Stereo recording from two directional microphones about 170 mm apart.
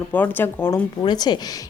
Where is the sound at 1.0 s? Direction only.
25° left (ahead or behind).